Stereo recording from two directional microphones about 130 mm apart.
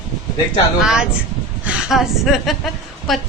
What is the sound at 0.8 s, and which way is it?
A woman's voice, 5° right (ahead or behind).